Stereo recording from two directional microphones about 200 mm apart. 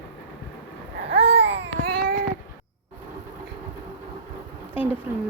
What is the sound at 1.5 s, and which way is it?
Baby cry, 60° right (ahead or behind).